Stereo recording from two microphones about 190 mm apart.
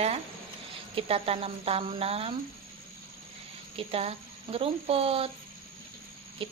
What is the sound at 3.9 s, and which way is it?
Speech, 30° right (ahead or behind).